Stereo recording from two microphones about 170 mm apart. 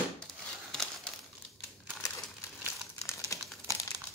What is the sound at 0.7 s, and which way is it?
Crumpling, 5° left (ahead or behind).